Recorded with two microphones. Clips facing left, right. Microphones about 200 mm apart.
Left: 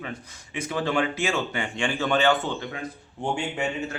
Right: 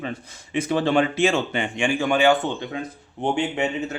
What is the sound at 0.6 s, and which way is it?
Speech, 30° right (ahead or behind).